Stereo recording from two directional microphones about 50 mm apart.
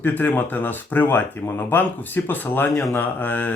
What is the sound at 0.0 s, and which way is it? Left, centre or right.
Speech, left.